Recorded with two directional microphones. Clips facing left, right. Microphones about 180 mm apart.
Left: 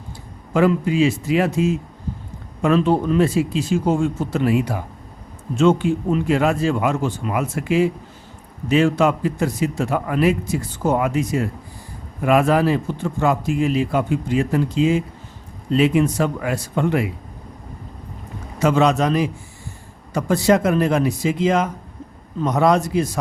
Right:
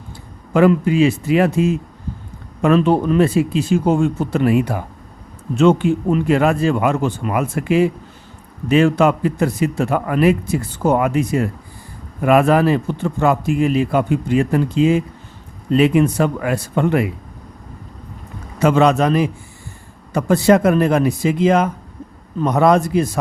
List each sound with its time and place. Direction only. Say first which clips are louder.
0.5 s a man's voice: right 4 dB; 60° right (ahead or behind)
18.6 s a man's voice: right 3 dB; 60° right (ahead or behind)